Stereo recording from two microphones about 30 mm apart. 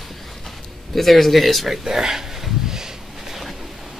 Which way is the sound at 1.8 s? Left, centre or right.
Right.